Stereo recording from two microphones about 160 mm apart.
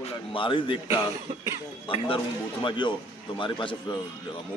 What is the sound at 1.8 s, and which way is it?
A man's voice, 35° left (ahead or behind).